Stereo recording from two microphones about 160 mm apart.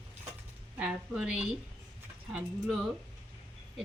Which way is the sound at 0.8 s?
5° right (ahead or behind).